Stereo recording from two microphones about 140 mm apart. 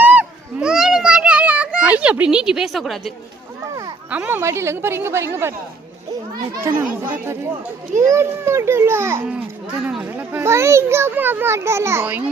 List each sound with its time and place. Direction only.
0.0 s children playing: 10° right (ahead or behind)
4.1 s a child's voice: 15° right (ahead or behind)
6.7 s a child's voice: 15° right (ahead or behind)